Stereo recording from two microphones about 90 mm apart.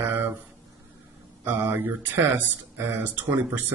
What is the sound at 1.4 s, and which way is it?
A man's voice, 25° right (ahead or behind).